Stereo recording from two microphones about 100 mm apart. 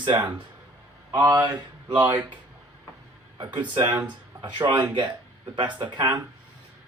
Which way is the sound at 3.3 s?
50° right (ahead or behind).